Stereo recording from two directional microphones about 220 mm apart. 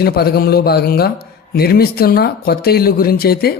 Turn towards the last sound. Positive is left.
turn(degrees=45)  # may be behind; listen again after turning